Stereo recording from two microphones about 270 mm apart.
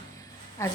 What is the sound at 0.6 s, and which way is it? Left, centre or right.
Speech, centre.